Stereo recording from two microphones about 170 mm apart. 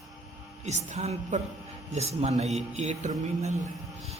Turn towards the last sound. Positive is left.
turn(degrees=-40)  # may be behind; listen again after turning